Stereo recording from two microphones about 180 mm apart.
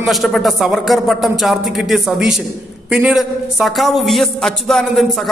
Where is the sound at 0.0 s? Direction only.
Centre (ahead or behind).